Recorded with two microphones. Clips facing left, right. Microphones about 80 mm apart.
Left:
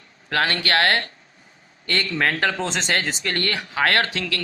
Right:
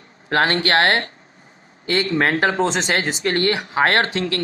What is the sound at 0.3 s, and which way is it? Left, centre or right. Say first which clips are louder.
Speech: right 4 dB; right.